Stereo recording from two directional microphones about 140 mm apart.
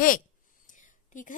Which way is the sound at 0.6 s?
65° left (ahead or behind).